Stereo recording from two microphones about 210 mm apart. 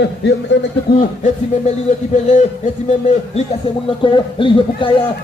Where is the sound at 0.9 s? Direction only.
50° left (ahead or behind).